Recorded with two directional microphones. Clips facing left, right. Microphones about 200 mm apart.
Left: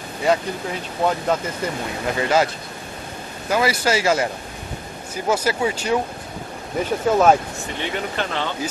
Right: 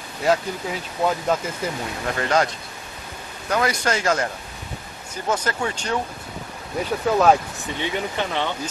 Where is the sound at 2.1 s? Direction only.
5° left (ahead or behind).